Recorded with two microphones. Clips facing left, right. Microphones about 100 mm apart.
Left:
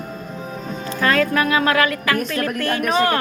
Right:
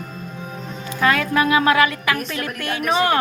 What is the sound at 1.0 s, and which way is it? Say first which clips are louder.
A woman's voice: even; 15° right (ahead or behind).